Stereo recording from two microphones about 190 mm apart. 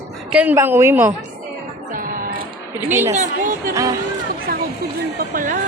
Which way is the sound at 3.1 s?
40° right (ahead or behind).